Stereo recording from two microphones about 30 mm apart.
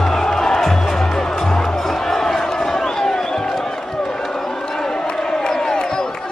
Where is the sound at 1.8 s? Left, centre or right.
Centre.